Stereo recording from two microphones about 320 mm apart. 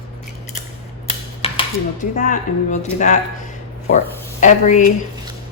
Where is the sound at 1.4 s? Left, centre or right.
Centre.